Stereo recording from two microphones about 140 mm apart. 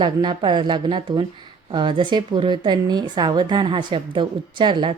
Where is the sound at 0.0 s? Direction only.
35° right (ahead or behind).